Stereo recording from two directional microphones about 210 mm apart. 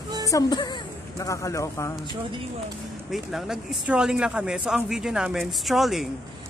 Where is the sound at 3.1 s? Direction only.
Centre (ahead or behind).